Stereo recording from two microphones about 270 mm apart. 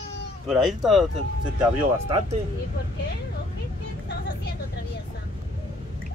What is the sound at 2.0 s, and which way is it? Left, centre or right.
Speech, right.